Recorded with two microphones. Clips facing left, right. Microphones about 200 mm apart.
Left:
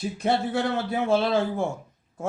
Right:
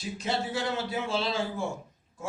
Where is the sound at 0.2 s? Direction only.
55° left (ahead or behind).